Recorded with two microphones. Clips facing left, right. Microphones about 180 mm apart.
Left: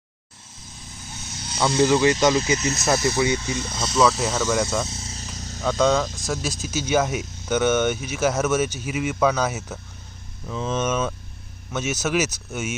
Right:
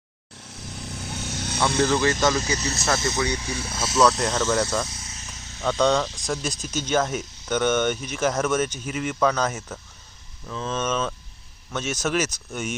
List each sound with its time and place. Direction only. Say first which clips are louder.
0.5 s vehicle: right 8 dB; 80° right
1.8 s speech: left 4 dB; 15° left (ahead or behind)
3.4 s speech: left 2 dB; 10° right (ahead or behind)
4.9 s cricket: left 5 dB; 30° left (ahead or behind)
5.6 s speech: left 1 dB; 5° left (ahead or behind)